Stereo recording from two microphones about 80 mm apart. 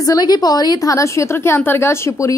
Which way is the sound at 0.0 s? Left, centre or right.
Left.